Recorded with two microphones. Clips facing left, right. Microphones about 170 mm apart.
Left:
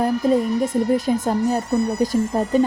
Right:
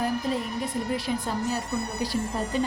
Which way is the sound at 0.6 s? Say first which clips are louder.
Left 10 dB; 45° left (ahead or behind).